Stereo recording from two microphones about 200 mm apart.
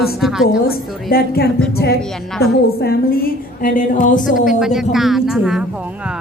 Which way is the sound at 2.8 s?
50° left (ahead or behind).